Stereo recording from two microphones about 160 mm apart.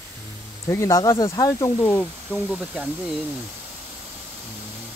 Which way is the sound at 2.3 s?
10° right (ahead or behind).